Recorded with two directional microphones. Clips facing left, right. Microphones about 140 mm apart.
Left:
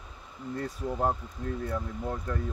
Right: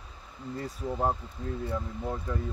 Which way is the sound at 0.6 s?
Centre (ahead or behind).